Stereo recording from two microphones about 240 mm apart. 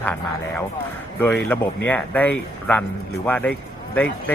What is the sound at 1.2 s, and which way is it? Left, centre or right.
A man's voice, centre.